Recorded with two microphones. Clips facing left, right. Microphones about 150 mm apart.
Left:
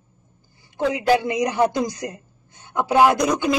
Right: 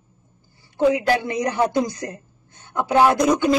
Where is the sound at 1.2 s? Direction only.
15° left (ahead or behind).